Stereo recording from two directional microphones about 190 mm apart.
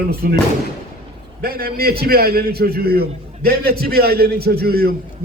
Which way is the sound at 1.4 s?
55° right (ahead or behind).